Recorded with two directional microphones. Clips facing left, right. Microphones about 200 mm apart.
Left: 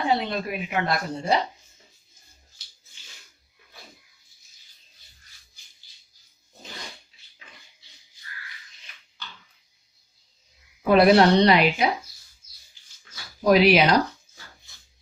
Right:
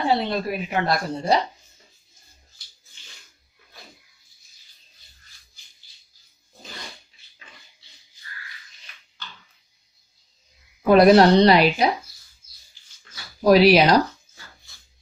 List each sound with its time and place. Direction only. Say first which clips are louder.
0.0 s a woman's voice: right 2 dB; 35° right (ahead or behind)
10.9 s a woman's voice: right 3 dB; 40° right (ahead or behind)
13.4 s a woman's voice: right 3 dB; 35° right (ahead or behind)